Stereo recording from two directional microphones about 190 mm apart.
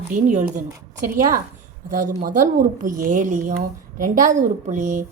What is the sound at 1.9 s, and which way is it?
A woman's voice, 45° right (ahead or behind).